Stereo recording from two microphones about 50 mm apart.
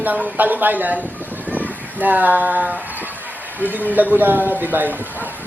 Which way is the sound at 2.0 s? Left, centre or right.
Right.